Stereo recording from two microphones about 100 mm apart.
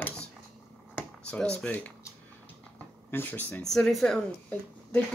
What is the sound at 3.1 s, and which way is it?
Speech, 20° left (ahead or behind).